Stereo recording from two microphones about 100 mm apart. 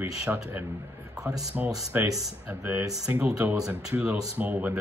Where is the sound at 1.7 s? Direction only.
35° right (ahead or behind).